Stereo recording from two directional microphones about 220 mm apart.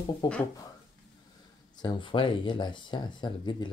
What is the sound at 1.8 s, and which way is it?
Speech, 20° left (ahead or behind).